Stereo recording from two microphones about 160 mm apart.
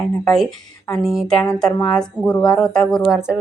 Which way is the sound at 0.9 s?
Centre (ahead or behind).